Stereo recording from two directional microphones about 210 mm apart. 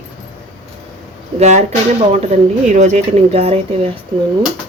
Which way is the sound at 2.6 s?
35° right (ahead or behind).